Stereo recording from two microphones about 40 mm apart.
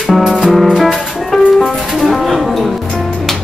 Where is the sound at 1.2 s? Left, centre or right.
Centre.